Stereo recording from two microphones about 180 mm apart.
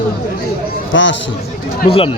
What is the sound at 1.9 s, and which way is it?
Speech, 30° left (ahead or behind).